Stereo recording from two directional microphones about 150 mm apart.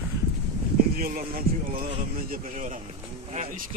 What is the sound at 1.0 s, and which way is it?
Speech, 75° right (ahead or behind).